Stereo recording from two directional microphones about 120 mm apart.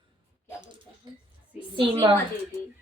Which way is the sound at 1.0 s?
40° right (ahead or behind).